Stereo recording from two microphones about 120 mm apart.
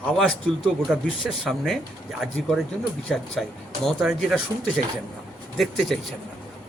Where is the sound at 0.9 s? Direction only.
5° right (ahead or behind).